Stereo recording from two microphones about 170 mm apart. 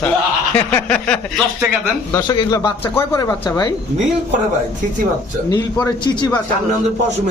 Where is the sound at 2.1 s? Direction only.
25° left (ahead or behind).